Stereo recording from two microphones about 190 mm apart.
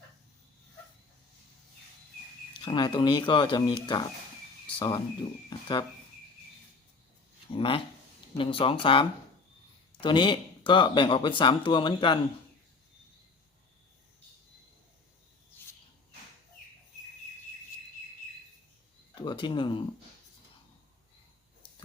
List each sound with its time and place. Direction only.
2.6 s speech: 25° left (ahead or behind)
7.5 s speech: 30° left (ahead or behind)
19.1 s speech: 25° left (ahead or behind)